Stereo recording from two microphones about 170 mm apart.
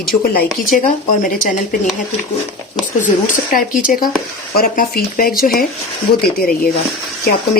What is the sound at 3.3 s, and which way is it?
Speech, 50° left (ahead or behind).